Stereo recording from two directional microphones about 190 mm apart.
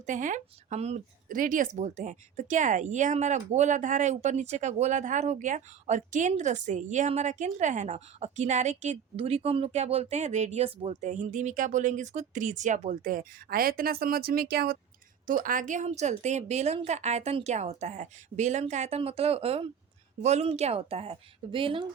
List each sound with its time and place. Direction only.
0.0 s speech: 40° right (ahead or behind)